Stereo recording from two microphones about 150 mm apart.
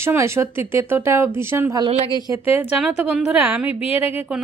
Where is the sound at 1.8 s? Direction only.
40° right (ahead or behind).